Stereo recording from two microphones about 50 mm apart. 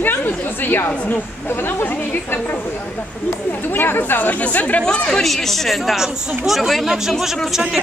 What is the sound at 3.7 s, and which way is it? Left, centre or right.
Speech, left.